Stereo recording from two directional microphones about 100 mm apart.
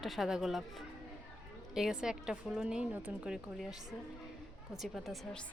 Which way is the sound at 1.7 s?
5° right (ahead or behind).